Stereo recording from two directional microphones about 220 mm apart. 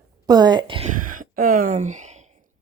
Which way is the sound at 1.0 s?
40° right (ahead or behind).